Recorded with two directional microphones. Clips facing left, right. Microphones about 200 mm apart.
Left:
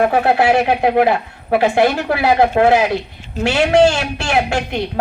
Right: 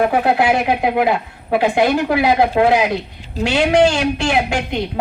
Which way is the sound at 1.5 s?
15° right (ahead or behind).